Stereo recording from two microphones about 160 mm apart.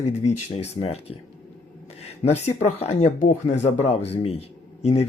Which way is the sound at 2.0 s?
40° left (ahead or behind).